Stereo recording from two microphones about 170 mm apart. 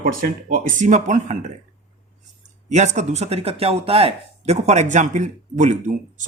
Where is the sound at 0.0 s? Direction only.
55° right (ahead or behind).